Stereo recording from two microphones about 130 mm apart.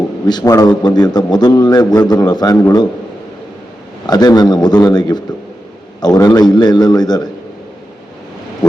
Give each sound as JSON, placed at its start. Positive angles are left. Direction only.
{"t": 0.3, "sound": "a man's voice", "side_deg": 30}
{"t": 4.0, "sound": "a man's voice", "side_deg": 30}